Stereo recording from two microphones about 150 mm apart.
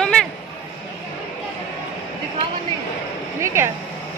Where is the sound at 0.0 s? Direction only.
5° left (ahead or behind).